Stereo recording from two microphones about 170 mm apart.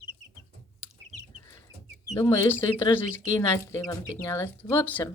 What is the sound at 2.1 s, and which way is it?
Speech, 15° left (ahead or behind).